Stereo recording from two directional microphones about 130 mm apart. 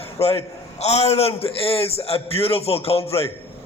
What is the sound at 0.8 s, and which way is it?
A man's voice, 55° left (ahead or behind).